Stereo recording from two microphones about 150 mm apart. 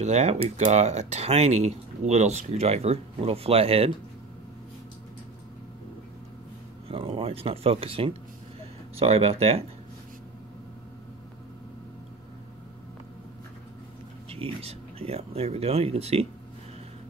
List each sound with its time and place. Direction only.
0.0 s speech: 45° right (ahead or behind)
6.9 s speech: 40° right (ahead or behind)
14.3 s speech: 40° right (ahead or behind)